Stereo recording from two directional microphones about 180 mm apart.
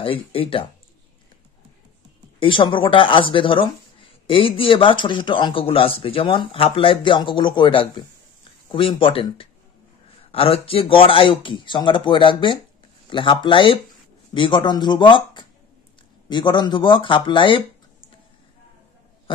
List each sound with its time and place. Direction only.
0.0 s speech: 30° left (ahead or behind)
2.4 s speech: 25° left (ahead or behind)